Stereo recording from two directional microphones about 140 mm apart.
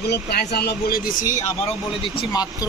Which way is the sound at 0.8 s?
90° left.